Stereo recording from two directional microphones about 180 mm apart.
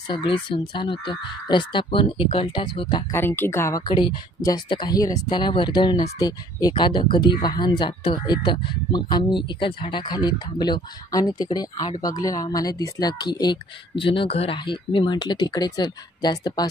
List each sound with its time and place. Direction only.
0.1 s speech: 25° left (ahead or behind)
3.2 s speech: 10° left (ahead or behind)